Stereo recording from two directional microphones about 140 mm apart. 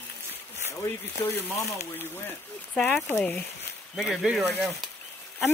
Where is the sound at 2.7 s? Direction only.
5° left (ahead or behind).